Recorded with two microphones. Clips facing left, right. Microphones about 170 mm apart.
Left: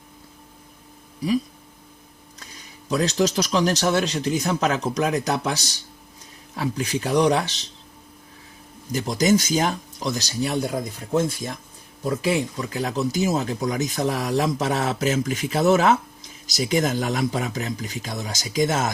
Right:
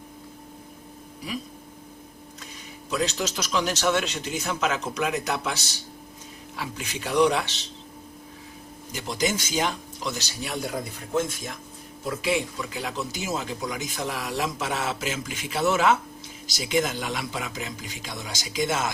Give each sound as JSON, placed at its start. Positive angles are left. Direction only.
{"t": 2.9, "sound": "speech", "side_deg": 35}
{"t": 8.9, "sound": "speech", "side_deg": 40}
{"t": 12.0, "sound": "speech", "side_deg": 40}